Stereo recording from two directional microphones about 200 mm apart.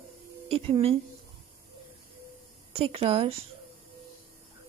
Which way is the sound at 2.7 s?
30° right (ahead or behind).